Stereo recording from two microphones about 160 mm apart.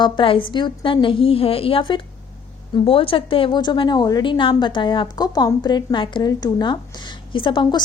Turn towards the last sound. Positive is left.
turn(degrees=30)  # may be behind; listen again after turning